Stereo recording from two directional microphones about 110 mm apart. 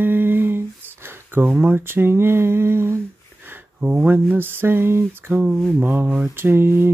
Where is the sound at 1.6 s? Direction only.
20° right (ahead or behind).